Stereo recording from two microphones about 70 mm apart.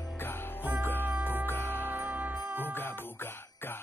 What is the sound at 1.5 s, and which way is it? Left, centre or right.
Music, left.